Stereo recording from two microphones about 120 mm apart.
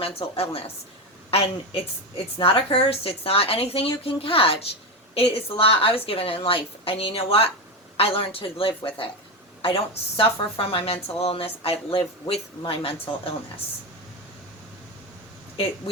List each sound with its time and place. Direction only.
0.0 s a woman's voice: 55° left (ahead or behind)